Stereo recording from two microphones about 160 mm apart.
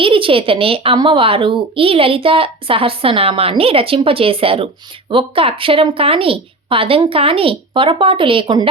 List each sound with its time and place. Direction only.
0.0 s a child's voice: 35° right (ahead or behind)